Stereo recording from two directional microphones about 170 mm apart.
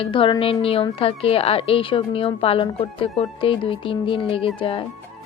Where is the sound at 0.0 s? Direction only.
30° left (ahead or behind).